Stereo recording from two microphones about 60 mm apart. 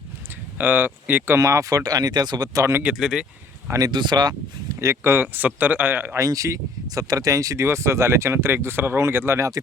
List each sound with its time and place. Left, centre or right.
0.6 s speech: right
1.4 s speech: right
2.9 s speech: centre
3.7 s speech: right
4.8 s speech: right
6.1 s speech: right